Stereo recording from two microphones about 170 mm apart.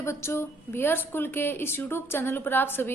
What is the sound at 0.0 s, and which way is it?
A woman's voice, 15° left (ahead or behind).